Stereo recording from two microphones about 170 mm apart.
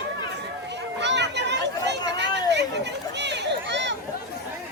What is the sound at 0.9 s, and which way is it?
Children playing, 90° right.